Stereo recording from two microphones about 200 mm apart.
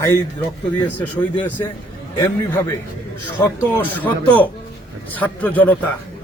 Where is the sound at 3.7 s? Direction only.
10° left (ahead or behind).